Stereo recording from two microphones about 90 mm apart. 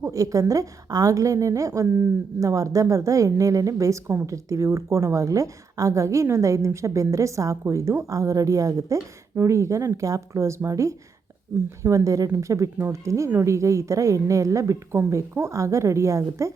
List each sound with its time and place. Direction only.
0.0 s a woman's voice: 40° right (ahead or behind)